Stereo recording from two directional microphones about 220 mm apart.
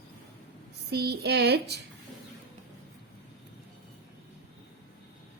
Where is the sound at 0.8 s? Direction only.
50° right (ahead or behind).